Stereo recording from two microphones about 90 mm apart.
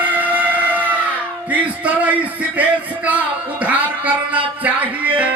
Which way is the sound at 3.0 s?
15° right (ahead or behind).